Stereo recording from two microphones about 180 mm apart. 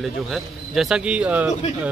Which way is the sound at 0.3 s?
Centre (ahead or behind).